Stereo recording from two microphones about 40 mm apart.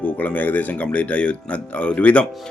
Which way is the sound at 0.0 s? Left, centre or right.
Left.